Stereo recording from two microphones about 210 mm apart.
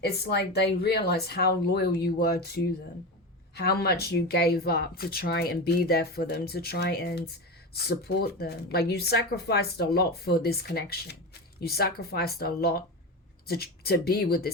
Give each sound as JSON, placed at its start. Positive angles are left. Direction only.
{"t": 0.0, "sound": "speech", "side_deg": 50}
{"t": 3.6, "sound": "speech", "side_deg": 50}